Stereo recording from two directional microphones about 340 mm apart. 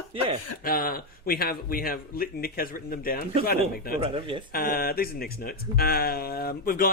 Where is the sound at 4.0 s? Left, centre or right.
Centre.